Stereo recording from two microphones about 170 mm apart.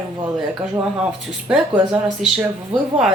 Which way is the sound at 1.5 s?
5° right (ahead or behind).